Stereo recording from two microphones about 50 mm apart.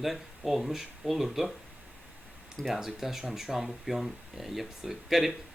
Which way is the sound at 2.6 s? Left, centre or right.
Centre.